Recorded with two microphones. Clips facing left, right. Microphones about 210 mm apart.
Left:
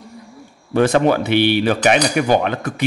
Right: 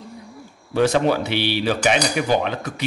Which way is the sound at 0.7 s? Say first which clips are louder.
Left 3 dB; 55° left (ahead or behind).